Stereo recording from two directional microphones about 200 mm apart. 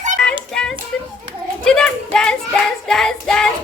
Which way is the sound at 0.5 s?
5° left (ahead or behind).